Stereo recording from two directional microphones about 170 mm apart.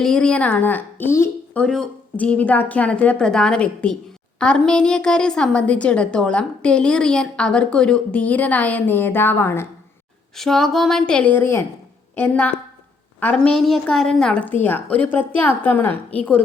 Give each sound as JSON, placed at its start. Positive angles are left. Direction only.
{"t": 0.0, "sound": "a woman's voice", "side_deg": 5}
{"t": 1.6, "sound": "a woman's voice", "side_deg": 5}
{"t": 10.3, "sound": "a woman's voice", "side_deg": 0}